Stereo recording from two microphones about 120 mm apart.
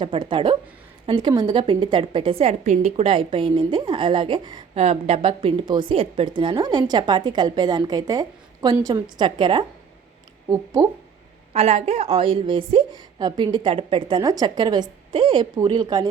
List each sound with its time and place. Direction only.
0.0 s a woman's voice: 45° right (ahead or behind)
4.7 s speech: 60° right (ahead or behind)
5.6 s a woman's voice: 35° right (ahead or behind)
10.5 s speech: 25° right (ahead or behind)
11.5 s a woman's voice: 60° right (ahead or behind)
12.9 s a woman's voice: 35° right (ahead or behind)